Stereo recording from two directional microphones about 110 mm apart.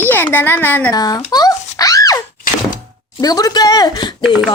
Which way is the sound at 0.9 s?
35° left (ahead or behind).